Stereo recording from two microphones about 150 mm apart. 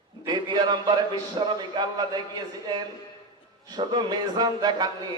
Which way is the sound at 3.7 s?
30° right (ahead or behind).